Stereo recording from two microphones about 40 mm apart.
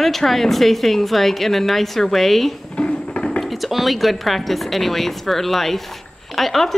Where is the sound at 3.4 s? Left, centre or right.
Centre.